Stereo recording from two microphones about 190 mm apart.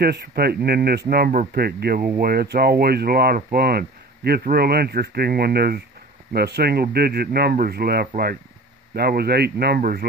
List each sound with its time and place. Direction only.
0.0 s speech: 55° right (ahead or behind)